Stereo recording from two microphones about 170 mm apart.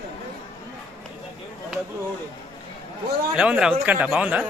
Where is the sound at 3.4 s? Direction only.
5° right (ahead or behind).